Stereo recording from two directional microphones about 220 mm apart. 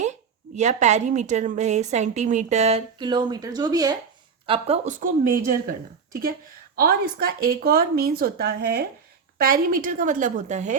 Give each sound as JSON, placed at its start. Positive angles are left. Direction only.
{"t": 0.0, "sound": "a woman's voice", "side_deg": -30}
{"t": 6.7, "sound": "a woman's voice", "side_deg": -45}